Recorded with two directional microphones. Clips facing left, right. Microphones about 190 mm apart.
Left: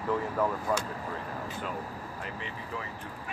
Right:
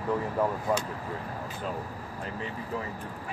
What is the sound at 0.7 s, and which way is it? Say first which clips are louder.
Speech: right 2 dB; 20° right (ahead or behind).